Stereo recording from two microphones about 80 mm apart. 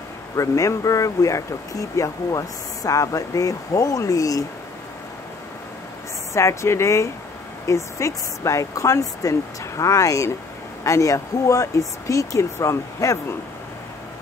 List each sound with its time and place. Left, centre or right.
0.4 s speech: left
6.3 s speech: left